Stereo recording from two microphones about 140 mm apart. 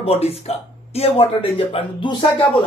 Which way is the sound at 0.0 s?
45° left (ahead or behind).